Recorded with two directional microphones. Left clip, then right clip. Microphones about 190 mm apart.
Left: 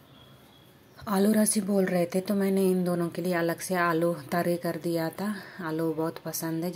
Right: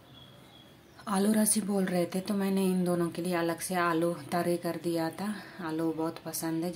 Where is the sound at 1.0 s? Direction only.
20° left (ahead or behind).